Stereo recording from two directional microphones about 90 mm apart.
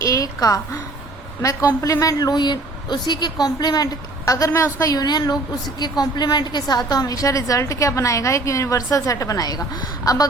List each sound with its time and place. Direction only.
0.0 s a sound: 40° left (ahead or behind)
1.4 s a woman's voice: 40° left (ahead or behind)
4.3 s a woman's voice: 35° left (ahead or behind)